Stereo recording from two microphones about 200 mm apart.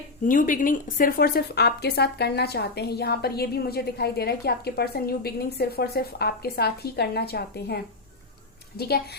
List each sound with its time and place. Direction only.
0.3 s speech: 40° left (ahead or behind)